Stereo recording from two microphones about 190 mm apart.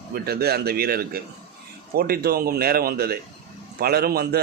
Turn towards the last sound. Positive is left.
turn(degrees=-55)  # may be behind; listen again after turning